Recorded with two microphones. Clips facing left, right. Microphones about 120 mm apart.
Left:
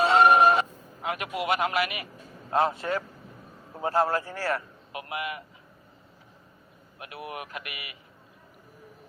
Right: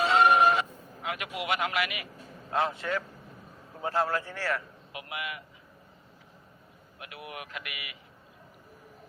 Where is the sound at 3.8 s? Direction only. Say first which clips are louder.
Left 4 dB; 40° left (ahead or behind).